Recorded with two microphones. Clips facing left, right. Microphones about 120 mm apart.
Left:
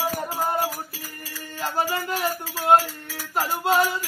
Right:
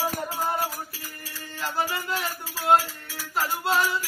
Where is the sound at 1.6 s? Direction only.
40° left (ahead or behind).